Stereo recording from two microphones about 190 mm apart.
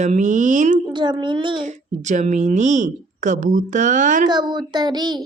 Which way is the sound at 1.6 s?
40° right (ahead or behind).